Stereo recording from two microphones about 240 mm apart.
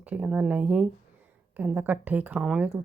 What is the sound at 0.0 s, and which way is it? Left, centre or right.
Speech, centre.